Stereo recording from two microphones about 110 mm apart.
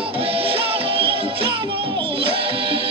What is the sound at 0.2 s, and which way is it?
Music, 55° right (ahead or behind).